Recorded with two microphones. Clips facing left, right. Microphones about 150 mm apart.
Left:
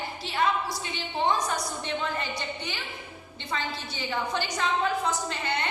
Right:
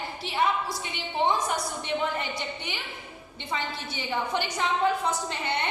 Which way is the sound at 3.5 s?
20° right (ahead or behind).